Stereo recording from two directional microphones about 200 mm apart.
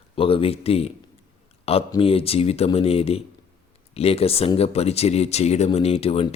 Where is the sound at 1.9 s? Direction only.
30° left (ahead or behind).